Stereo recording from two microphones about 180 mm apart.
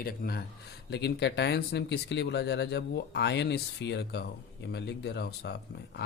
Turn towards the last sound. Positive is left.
turn(degrees=65)  # may be behind; listen again after turning